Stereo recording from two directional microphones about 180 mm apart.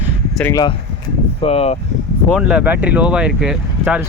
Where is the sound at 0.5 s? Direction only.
25° left (ahead or behind).